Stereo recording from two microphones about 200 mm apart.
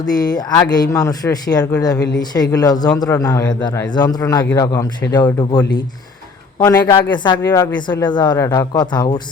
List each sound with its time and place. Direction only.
0.0 s a man's voice: 20° left (ahead or behind)